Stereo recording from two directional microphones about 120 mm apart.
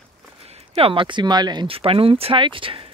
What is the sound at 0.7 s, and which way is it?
Speech, 50° right (ahead or behind).